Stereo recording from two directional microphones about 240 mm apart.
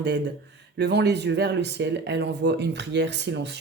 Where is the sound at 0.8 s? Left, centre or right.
Right.